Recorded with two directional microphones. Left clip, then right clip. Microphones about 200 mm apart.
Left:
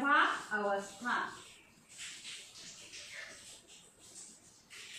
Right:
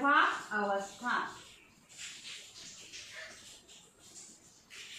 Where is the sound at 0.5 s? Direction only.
15° right (ahead or behind).